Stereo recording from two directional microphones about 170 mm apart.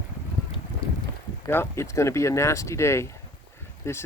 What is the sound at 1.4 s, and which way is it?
Speech, 15° left (ahead or behind).